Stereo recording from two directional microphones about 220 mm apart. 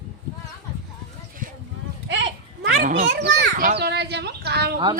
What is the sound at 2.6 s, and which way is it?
Speech, 45° right (ahead or behind).